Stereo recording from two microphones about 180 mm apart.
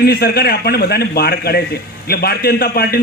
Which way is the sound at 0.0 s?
60° left (ahead or behind).